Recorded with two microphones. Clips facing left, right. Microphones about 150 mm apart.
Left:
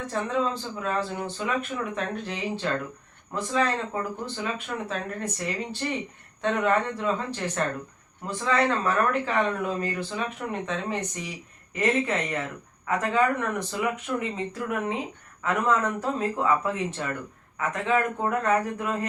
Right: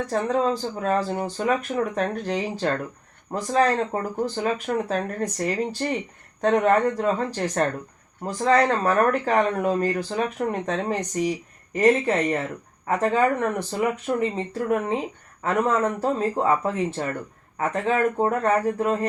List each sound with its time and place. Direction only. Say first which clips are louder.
0.1 s speech: right 4 dB; 40° right (ahead or behind)